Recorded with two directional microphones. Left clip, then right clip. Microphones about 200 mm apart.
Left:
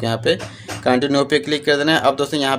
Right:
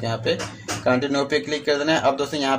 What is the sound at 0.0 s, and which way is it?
Speech, 35° left (ahead or behind).